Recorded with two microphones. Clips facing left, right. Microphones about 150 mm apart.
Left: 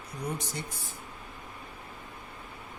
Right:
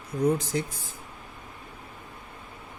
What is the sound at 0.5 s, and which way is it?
Speech, 90° right.